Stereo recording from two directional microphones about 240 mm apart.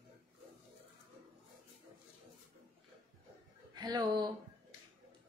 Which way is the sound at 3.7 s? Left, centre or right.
Centre.